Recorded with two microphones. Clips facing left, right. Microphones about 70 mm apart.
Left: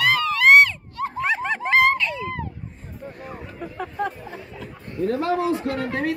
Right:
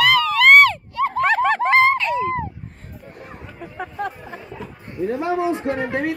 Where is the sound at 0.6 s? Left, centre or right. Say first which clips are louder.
Right 9 dB; right.